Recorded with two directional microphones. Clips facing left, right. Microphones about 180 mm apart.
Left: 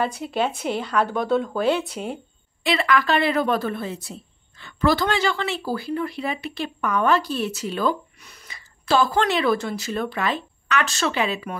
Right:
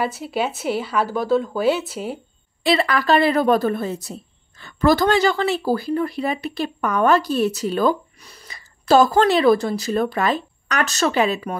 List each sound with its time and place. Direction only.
0.0 s speech: 5° right (ahead or behind)
2.6 s a woman's voice: 35° right (ahead or behind)